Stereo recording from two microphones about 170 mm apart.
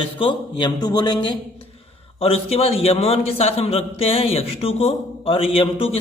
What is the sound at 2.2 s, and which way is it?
A man's voice, 35° left (ahead or behind).